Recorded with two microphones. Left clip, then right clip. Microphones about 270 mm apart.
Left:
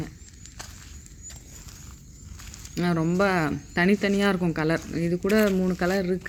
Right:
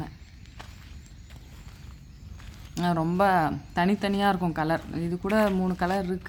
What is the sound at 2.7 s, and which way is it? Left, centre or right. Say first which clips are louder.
Speech: left 1 dB; centre.